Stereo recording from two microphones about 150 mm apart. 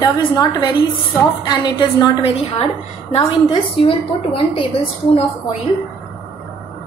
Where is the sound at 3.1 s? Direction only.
35° left (ahead or behind).